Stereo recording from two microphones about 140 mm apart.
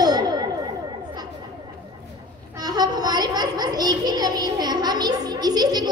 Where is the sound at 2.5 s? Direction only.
30° right (ahead or behind).